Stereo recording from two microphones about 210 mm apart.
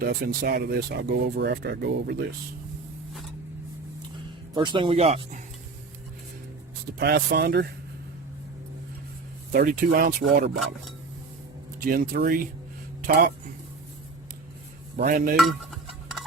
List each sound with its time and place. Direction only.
0.0 s speech: 45° right (ahead or behind)
4.5 s speech: 20° right (ahead or behind)
7.0 s speech: 50° right (ahead or behind)
9.5 s speech: 45° right (ahead or behind)
11.9 s speech: 45° right (ahead or behind)
14.9 s speech: 40° right (ahead or behind)
15.4 s cutlery: centre (ahead or behind)